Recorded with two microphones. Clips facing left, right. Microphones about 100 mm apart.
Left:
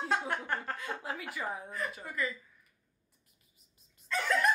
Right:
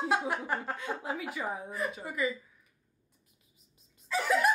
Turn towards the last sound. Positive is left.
turn(degrees=-5)  # may be behind; listen again after turning